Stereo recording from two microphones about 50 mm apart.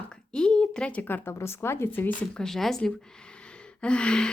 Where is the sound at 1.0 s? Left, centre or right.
Left.